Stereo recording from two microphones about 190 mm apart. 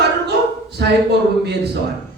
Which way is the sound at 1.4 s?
60° right (ahead or behind).